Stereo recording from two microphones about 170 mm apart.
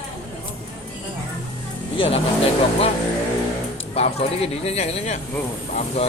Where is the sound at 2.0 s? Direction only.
35° left (ahead or behind).